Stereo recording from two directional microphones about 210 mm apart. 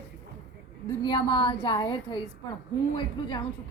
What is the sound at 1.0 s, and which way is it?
A woman's voice, 20° left (ahead or behind).